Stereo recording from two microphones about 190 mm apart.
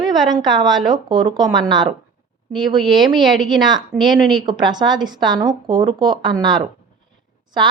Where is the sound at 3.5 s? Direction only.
20° right (ahead or behind).